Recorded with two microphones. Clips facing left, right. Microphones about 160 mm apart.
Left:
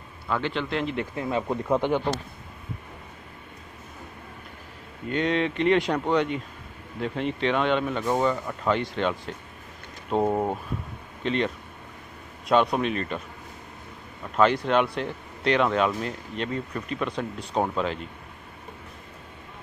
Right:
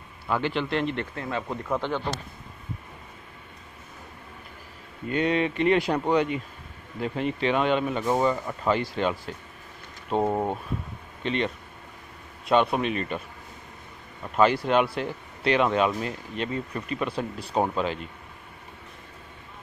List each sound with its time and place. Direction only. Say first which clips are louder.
0.3 s speech: right 1 dB; 5° right (ahead or behind)
1.1 s speech: left 4 dB; 15° left (ahead or behind)
5.1 s speech: even; 5° right (ahead or behind)
14.3 s speech: even; 5° right (ahead or behind)